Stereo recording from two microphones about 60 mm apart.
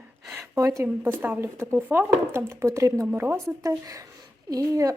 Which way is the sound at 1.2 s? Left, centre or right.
Right.